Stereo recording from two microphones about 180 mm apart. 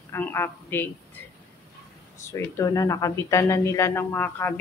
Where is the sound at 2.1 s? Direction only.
15° left (ahead or behind).